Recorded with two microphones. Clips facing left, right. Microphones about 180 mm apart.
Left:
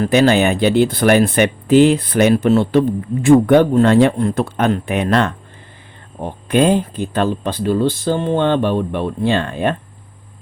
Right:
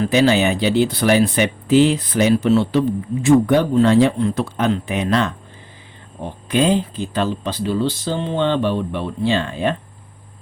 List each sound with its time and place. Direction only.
0.0 s speech: 55° left (ahead or behind)
6.5 s speech: 55° left (ahead or behind)